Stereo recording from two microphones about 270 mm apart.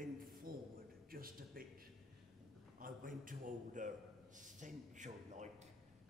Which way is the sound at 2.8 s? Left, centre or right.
Right.